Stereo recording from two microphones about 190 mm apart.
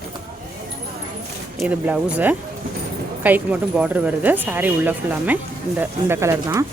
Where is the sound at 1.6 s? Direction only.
5° right (ahead or behind).